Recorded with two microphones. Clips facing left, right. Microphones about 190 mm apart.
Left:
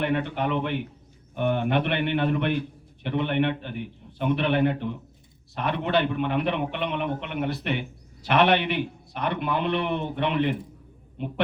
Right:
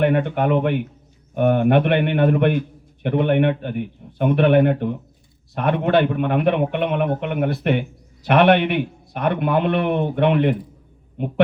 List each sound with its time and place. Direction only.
0.0 s a man's voice: 55° right (ahead or behind)